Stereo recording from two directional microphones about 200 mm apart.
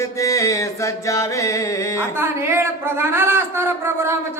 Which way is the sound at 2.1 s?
10° right (ahead or behind).